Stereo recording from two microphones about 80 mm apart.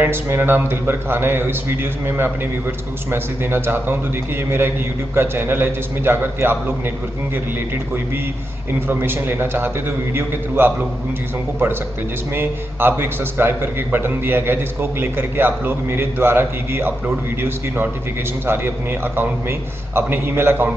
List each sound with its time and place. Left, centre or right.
0.0 s a man's voice: right
8.8 s a man's voice: right
12.4 s a man's voice: right
18.5 s a man's voice: right